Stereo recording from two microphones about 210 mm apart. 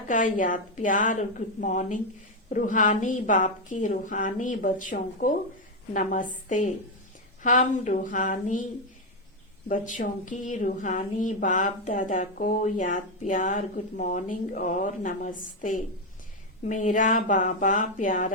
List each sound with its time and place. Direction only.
0.1 s speech: 40° left (ahead or behind)
9.6 s speech: 35° left (ahead or behind)